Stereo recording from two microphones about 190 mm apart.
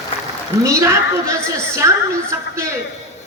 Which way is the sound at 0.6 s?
15° right (ahead or behind).